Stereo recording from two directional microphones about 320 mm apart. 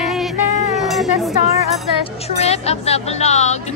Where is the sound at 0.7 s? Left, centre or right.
Centre.